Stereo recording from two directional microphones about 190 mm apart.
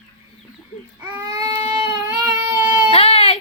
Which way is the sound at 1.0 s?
15° right (ahead or behind).